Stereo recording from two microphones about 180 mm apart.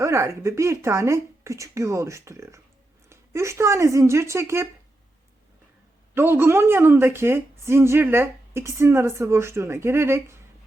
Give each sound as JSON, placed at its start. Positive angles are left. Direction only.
{"t": 0.0, "sound": "a woman's voice", "side_deg": -15}
{"t": 6.1, "sound": "a woman's voice", "side_deg": -15}